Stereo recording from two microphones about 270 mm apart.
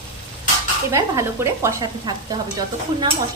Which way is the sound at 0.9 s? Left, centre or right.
Centre.